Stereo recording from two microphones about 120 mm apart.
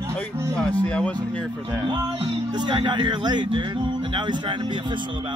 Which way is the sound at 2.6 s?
40° right (ahead or behind).